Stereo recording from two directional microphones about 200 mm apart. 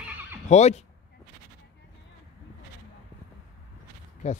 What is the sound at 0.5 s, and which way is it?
Speech, 35° left (ahead or behind).